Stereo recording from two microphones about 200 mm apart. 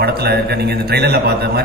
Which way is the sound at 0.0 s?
55° right (ahead or behind).